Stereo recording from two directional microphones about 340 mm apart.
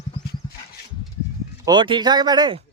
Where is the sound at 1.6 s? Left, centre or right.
Centre.